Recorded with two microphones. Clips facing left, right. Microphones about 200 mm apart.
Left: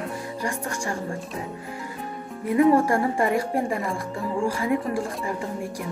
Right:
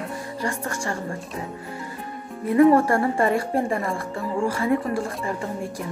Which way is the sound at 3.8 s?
Centre (ahead or behind).